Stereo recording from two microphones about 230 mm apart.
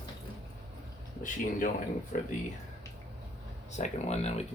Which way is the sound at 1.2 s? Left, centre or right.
Left.